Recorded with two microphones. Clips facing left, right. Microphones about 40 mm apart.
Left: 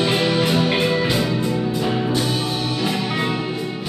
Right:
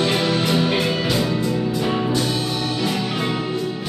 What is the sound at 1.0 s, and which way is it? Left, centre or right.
Music, left.